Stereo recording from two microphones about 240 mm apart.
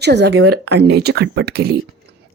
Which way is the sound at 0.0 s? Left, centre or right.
Right.